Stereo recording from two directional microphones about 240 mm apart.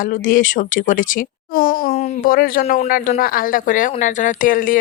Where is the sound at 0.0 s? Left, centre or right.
Left.